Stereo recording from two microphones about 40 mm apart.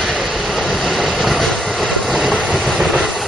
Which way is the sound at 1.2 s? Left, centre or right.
Centre.